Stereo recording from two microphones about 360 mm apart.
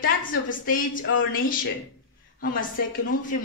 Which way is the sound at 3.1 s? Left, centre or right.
Left.